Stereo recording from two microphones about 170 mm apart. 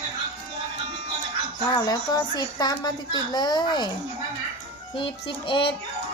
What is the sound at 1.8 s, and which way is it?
Speech, 25° left (ahead or behind).